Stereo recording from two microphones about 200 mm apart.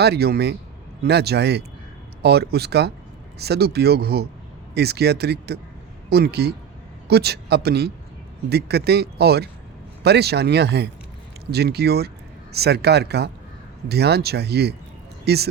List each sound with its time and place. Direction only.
0.0 s speech: 55° right (ahead or behind)